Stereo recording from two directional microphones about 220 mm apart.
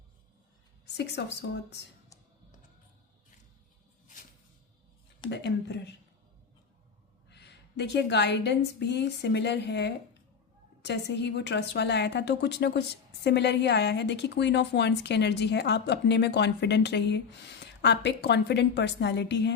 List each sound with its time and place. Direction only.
0.9 s a woman's voice: 50° left (ahead or behind)
5.3 s a woman's voice: 50° left (ahead or behind)
7.3 s a woman's voice: 50° left (ahead or behind)